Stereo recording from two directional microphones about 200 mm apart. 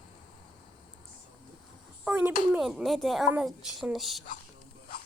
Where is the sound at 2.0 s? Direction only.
5° right (ahead or behind).